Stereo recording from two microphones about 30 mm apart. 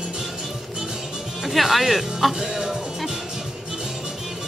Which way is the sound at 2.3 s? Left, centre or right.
Right.